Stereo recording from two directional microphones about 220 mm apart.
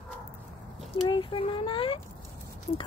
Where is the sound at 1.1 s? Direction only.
25° left (ahead or behind).